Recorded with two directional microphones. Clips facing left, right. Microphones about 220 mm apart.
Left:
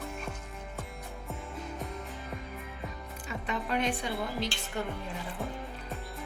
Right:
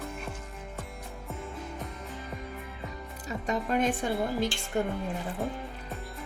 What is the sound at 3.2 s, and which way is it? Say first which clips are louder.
Speech: right 4 dB; 40° right (ahead or behind).